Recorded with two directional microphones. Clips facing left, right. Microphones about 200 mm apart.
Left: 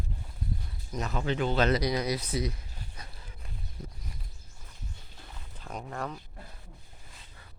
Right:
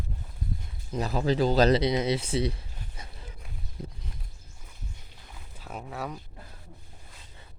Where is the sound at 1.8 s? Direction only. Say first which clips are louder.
Right 4 dB; 25° right (ahead or behind).